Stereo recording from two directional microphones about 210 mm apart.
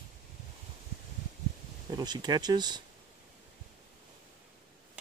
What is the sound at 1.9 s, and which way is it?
Speech, 20° right (ahead or behind).